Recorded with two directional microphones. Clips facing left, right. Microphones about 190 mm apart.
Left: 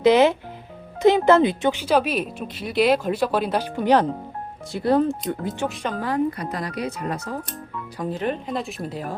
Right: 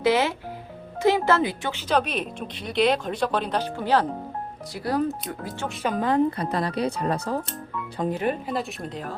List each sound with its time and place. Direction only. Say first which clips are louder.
0.0 s speech: left 6 dB; 20° left (ahead or behind)
1.9 s speech: even; 5° left (ahead or behind); by 5.5 s 25° left (ahead or behind)
5.8 s speech: right 3 dB; 15° right (ahead or behind); by 7.2 s 30° right (ahead or behind)
7.9 s speech: right 2 dB; 20° right (ahead or behind)
8.2 s speech: even; 5° right (ahead or behind)